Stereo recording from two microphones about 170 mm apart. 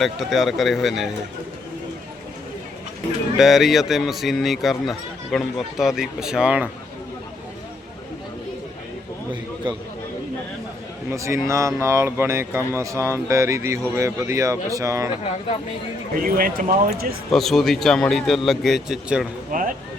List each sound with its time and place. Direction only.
0.0 s speech: centre (ahead or behind)
3.3 s speech: centre (ahead or behind)
11.1 s speech: 15° right (ahead or behind)
16.1 s speech: 55° right (ahead or behind)
17.3 s speech: centre (ahead or behind)
19.5 s speech: 55° right (ahead or behind)